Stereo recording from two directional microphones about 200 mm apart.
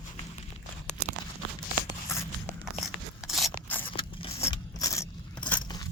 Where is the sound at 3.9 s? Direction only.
25° left (ahead or behind).